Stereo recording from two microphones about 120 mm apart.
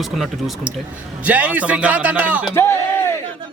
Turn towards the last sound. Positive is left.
turn(degrees=20)  # may be behind; listen again after turning